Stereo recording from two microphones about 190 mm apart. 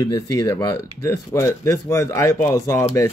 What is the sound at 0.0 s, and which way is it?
A man's voice, 20° left (ahead or behind).